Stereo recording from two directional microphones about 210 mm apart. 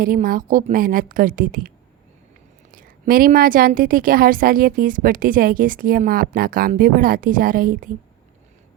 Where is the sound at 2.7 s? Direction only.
45° right (ahead or behind).